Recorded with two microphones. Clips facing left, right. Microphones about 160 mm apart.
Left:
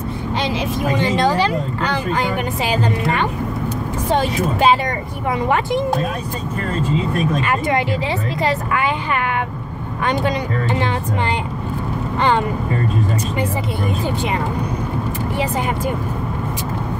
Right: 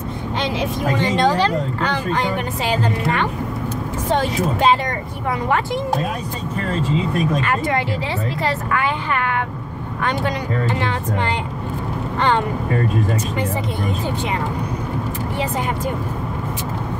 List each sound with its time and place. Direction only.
0.9 s speech: 5° left (ahead or behind)
7.4 s speech: 15° left (ahead or behind)